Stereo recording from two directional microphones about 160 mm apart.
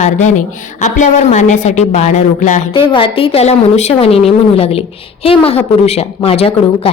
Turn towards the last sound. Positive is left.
turn(degrees=35)  # may be behind; listen again after turning